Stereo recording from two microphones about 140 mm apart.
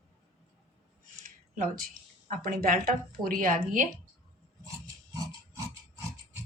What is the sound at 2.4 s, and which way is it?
A woman's voice, 90° right.